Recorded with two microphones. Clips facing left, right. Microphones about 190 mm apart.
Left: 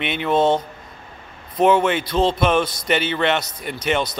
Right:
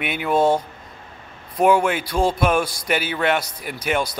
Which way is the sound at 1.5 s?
10° right (ahead or behind).